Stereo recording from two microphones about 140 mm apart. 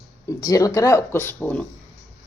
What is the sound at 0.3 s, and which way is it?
Speech, 25° left (ahead or behind).